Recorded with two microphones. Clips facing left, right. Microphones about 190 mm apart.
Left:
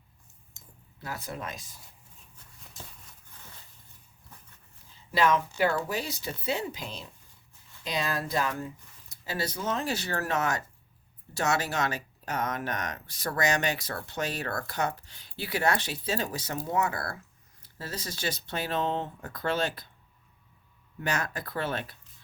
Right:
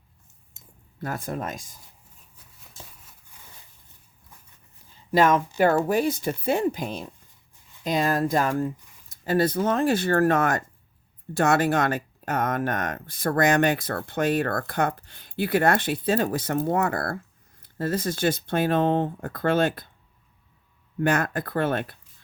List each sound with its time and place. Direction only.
0.9 s speech: 50° right (ahead or behind)
5.1 s speech: 50° right (ahead or behind)
21.0 s speech: 55° right (ahead or behind)